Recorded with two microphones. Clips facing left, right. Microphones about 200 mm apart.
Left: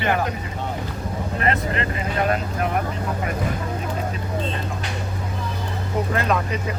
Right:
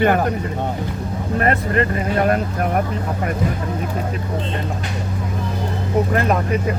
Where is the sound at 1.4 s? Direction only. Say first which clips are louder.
Right 5 dB; 50° right (ahead or behind).